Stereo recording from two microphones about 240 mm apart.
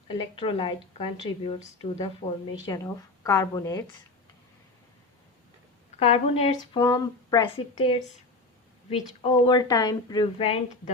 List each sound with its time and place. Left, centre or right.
0.1 s a woman's voice: left
2.6 s a woman's voice: centre
6.0 s a woman's voice: left